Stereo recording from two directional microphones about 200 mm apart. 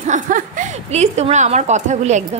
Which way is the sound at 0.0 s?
40° right (ahead or behind).